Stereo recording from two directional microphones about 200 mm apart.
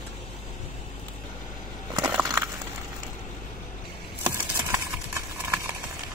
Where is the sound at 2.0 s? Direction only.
10° right (ahead or behind).